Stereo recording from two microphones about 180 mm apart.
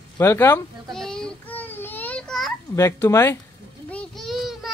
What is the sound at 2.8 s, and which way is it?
Speech, 15° left (ahead or behind).